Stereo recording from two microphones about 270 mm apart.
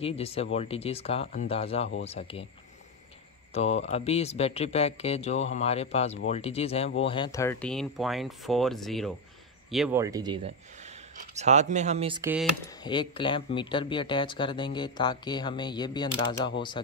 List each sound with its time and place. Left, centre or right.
0.0 s speech: left
3.5 s speech: left; by 12.3 s centre
12.6 s speech: centre